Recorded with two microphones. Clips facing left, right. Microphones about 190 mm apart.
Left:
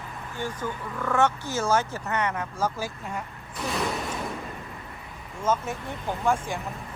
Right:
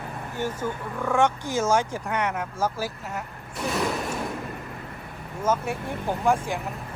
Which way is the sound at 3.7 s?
Centre (ahead or behind).